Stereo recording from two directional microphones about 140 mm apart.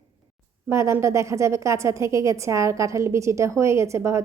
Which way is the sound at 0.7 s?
20° right (ahead or behind).